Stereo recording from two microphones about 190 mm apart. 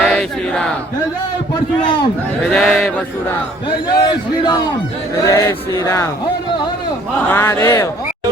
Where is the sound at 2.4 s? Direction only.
Centre (ahead or behind).